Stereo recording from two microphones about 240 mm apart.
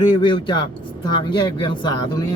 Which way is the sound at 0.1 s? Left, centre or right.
Centre.